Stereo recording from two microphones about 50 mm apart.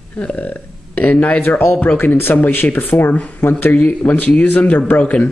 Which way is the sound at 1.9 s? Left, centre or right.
Left.